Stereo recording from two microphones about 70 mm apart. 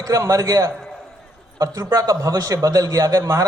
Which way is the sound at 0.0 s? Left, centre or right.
Right.